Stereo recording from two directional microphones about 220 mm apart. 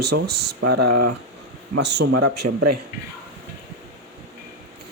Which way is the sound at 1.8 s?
50° right (ahead or behind).